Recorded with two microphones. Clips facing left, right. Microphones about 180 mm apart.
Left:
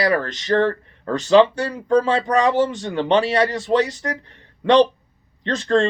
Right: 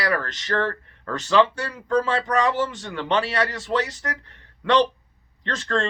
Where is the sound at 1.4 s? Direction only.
35° left (ahead or behind).